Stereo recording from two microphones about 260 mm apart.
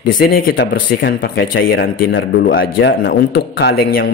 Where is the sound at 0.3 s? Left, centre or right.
Left.